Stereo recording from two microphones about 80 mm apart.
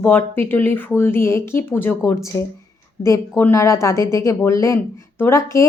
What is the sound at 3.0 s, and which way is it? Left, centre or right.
A woman's voice, left.